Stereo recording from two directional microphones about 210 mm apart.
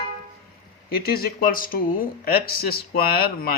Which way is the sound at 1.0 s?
45° left (ahead or behind).